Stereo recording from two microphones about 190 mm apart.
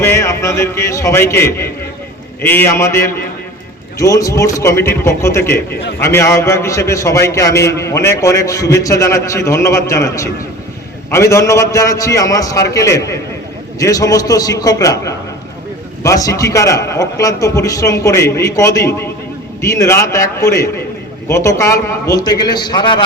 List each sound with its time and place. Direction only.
0.0 s a man's voice: 15° left (ahead or behind)